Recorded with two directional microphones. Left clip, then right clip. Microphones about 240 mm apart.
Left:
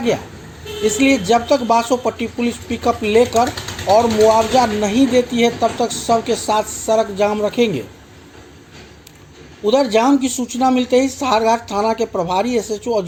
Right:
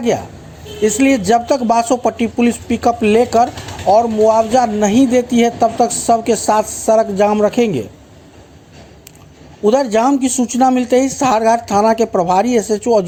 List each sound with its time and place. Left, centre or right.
1.1 s speech: right
9.6 s speech: right